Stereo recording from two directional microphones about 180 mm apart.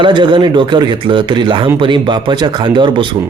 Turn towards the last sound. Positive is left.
turn(degrees=-25)  # may be behind; listen again after turning